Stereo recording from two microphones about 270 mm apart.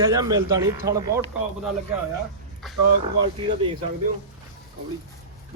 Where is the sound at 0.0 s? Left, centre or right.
Centre.